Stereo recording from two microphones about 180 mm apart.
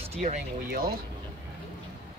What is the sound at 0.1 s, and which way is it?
Speech, 35° right (ahead or behind).